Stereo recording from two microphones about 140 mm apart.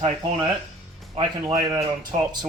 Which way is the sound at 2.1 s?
55° right (ahead or behind).